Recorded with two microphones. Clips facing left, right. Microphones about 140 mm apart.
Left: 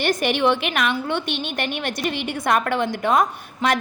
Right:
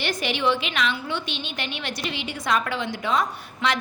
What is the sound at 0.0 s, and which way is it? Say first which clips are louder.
A woman's voice: left 5 dB; 50° left (ahead or behind).